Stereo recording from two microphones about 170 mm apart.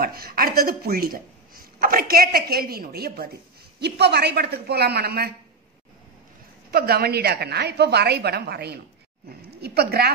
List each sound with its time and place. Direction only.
0.0 s a woman's voice: 65° right (ahead or behind)
3.8 s a woman's voice: 75° right (ahead or behind)
6.7 s a woman's voice: 65° right (ahead or behind)